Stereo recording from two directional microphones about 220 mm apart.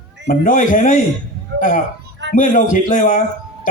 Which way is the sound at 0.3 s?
40° left (ahead or behind).